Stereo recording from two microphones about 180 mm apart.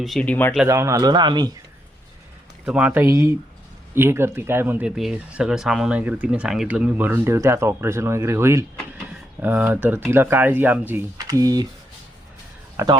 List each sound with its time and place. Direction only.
0.0 s speech: 5° left (ahead or behind)
0.7 s a man's voice: 15° right (ahead or behind)
2.6 s a man's voice: 5° right (ahead or behind)
12.7 s speech: 20° right (ahead or behind)